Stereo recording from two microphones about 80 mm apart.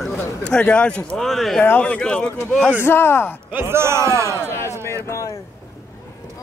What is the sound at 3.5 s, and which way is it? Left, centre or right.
Speech, right.